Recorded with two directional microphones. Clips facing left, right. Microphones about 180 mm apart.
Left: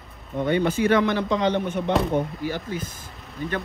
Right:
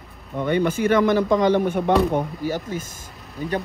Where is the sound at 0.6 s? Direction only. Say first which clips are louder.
Right 3 dB; 50° right (ahead or behind).